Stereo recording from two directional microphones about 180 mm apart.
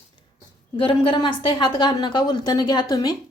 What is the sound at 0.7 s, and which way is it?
A woman's voice, 25° left (ahead or behind).